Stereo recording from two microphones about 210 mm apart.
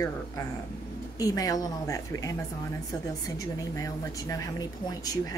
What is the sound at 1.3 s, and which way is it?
Speech, 15° left (ahead or behind).